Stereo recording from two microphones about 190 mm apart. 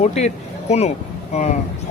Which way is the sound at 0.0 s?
35° left (ahead or behind).